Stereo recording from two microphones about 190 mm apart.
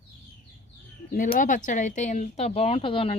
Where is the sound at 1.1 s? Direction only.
45° left (ahead or behind).